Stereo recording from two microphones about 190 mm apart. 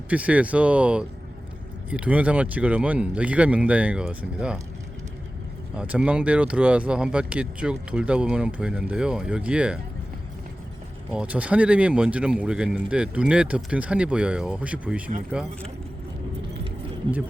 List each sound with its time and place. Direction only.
0.1 s speech: 5° right (ahead or behind)
5.7 s speech: 5° right (ahead or behind)
11.1 s speech: 5° right (ahead or behind)